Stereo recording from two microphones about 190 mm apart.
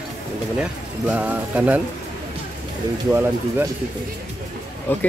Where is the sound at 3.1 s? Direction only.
10° right (ahead or behind).